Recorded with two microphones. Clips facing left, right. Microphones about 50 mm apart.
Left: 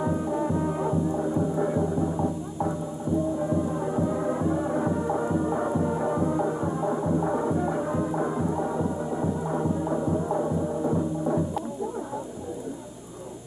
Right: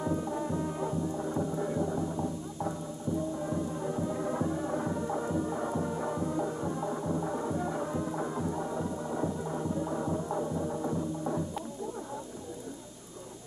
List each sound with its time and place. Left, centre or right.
0.0 s music: left